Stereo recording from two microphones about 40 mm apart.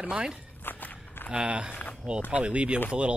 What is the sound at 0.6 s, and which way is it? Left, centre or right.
Walk, left.